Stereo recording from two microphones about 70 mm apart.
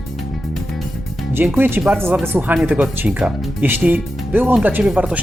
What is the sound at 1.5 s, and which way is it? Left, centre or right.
Speech, right.